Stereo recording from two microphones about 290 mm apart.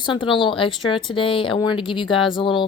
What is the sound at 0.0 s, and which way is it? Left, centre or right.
Speech, centre.